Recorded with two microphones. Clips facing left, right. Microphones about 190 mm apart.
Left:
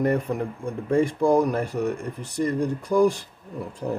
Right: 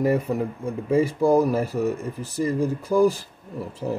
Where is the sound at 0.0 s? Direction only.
5° right (ahead or behind).